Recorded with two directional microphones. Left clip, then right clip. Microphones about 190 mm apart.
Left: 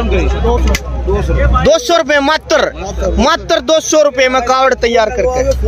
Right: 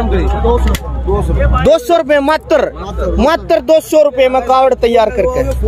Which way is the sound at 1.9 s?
10° right (ahead or behind).